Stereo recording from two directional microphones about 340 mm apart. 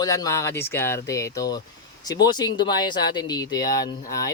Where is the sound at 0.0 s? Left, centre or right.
Centre.